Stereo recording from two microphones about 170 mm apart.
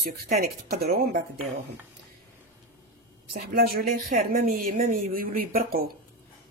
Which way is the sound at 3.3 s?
60° right (ahead or behind).